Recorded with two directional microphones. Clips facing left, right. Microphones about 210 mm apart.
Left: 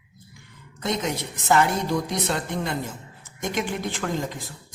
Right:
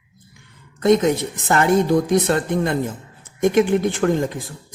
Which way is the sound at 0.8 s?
50° right (ahead or behind).